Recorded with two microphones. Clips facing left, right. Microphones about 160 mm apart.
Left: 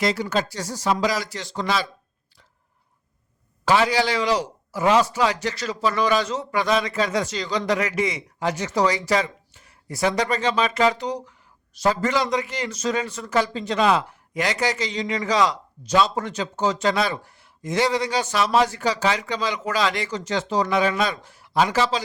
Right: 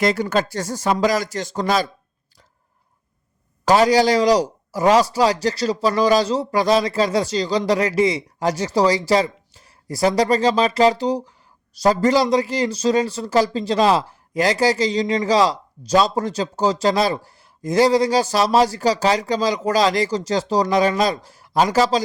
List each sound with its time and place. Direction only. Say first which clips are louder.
0.0 s speech: right 4 dB; 50° right (ahead or behind)
3.7 s speech: right 5 dB; 40° right (ahead or behind)